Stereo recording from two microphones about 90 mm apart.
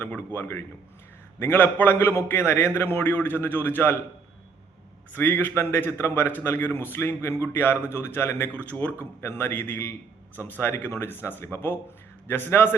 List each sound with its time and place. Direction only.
0.1 s a man's voice: 20° left (ahead or behind)
5.1 s a man's voice: 20° left (ahead or behind)
8.5 s a man's voice: 15° left (ahead or behind)